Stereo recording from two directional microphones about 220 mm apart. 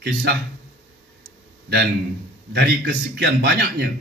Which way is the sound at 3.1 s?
50° right (ahead or behind).